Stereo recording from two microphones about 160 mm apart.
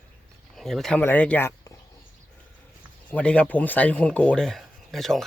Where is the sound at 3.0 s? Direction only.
10° left (ahead or behind).